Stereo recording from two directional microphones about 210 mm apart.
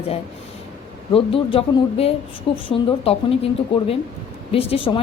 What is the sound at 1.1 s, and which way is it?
Speech, 25° left (ahead or behind).